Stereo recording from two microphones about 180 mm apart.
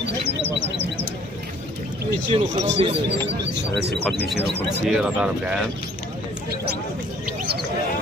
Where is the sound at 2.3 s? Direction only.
30° right (ahead or behind).